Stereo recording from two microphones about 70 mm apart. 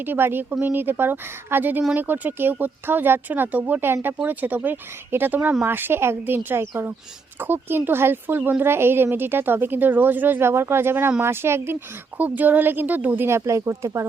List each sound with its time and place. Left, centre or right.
0.0 s speech: right
8.4 s speech: right
8.6 s speech: right